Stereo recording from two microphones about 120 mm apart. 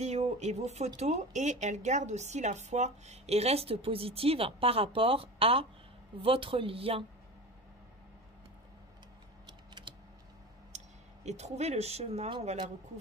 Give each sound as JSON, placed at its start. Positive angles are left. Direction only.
{"t": 0.0, "sound": "speech", "side_deg": -65}
{"t": 9.9, "sound": "typing", "side_deg": -45}
{"t": 10.7, "sound": "clicking", "side_deg": -75}
{"t": 11.2, "sound": "speech", "side_deg": -65}